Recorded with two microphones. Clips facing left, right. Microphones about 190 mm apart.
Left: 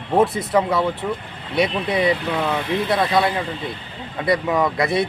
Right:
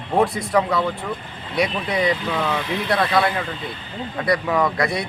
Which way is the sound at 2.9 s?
20° left (ahead or behind).